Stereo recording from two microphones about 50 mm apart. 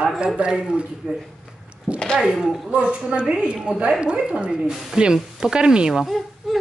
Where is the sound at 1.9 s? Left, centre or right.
Centre.